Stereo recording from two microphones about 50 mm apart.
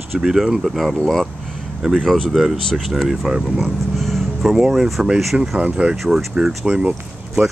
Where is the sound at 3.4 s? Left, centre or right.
Centre.